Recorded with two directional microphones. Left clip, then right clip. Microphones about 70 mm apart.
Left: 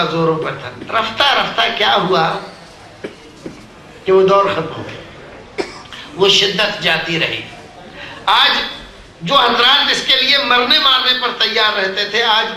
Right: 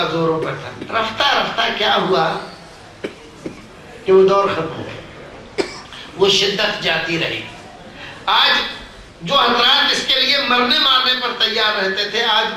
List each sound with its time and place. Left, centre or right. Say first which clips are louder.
0.1 s a man's voice: left 2 dB; left
3.0 s a sound: right 1 dB; right
4.0 s a man's voice: left 1 dB; left
6.1 s a man's voice: left 3 dB; left